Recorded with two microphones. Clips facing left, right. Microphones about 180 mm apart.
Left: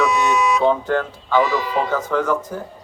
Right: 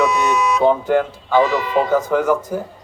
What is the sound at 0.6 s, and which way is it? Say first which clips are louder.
Speech: right 3 dB; 15° right (ahead or behind).